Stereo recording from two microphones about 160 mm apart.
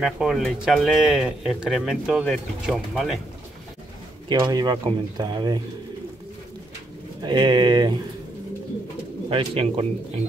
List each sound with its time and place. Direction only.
0.0 s speech: centre (ahead or behind)
4.3 s speech: 25° right (ahead or behind)
7.2 s speech: 30° right (ahead or behind)
9.3 s speech: 35° right (ahead or behind)